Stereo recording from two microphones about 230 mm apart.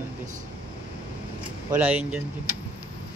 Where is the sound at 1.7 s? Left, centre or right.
Centre.